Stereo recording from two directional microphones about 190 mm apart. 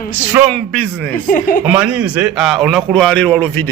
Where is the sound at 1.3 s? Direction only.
45° left (ahead or behind).